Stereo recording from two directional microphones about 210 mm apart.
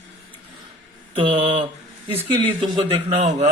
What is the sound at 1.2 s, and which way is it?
Speech, 25° right (ahead or behind).